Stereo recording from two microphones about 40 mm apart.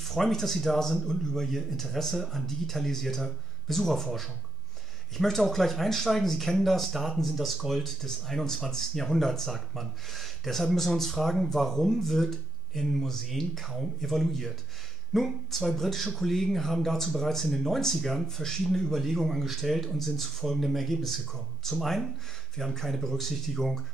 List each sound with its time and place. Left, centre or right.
0.0 s speech: centre